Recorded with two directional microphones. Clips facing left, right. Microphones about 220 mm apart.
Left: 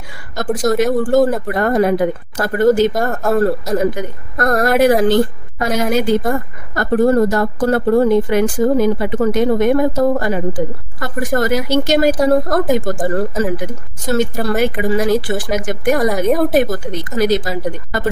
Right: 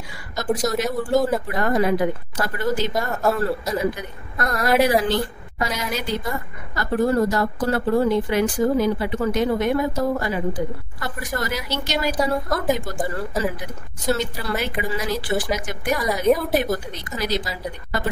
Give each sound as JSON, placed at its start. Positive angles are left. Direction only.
{"t": 0.6, "sound": "a woman's voice", "side_deg": 50}